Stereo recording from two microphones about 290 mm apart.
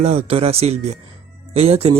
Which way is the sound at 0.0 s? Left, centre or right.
Right.